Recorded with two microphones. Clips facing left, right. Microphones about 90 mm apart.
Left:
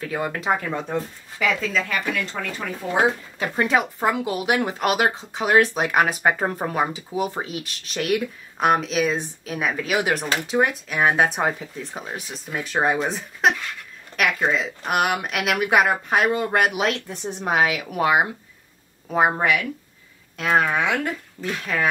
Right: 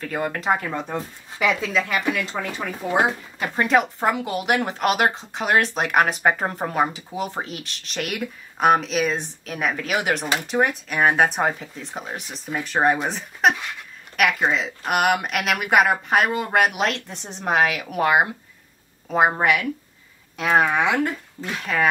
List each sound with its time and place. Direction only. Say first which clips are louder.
0.0 s speech: even; centre (ahead or behind)
3.3 s speech: right 4 dB; centre (ahead or behind)
14.1 s a sound: right 2 dB; 20° left (ahead or behind)
14.9 s speech: right 2 dB; centre (ahead or behind)